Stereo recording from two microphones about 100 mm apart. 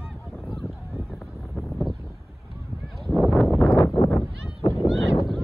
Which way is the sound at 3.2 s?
Centre (ahead or behind).